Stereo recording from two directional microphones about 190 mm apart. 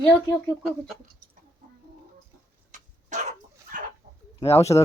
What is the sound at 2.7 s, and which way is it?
Dog, 40° right (ahead or behind).